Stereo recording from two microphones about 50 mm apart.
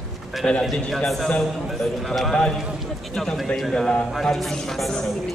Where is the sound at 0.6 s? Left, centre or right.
Centre.